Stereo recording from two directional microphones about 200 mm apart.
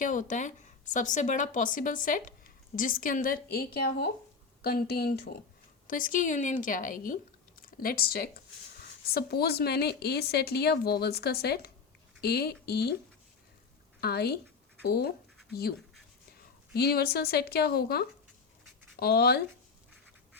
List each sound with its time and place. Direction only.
0.0 s a woman's voice: 40° left (ahead or behind)
14.0 s a woman's voice: 50° left (ahead or behind)
16.7 s a woman's voice: 50° left (ahead or behind)